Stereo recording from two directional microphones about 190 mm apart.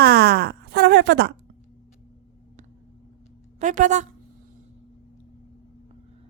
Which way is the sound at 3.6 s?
40° right (ahead or behind).